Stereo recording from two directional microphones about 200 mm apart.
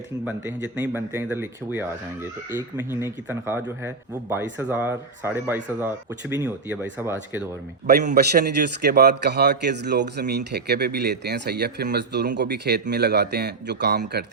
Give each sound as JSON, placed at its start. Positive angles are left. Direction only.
{"t": 0.3, "sound": "a man's voice", "side_deg": -10}
{"t": 8.1, "sound": "speech", "side_deg": -55}